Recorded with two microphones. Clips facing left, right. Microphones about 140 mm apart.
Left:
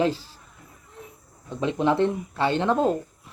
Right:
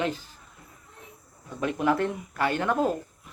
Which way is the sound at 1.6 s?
25° left (ahead or behind).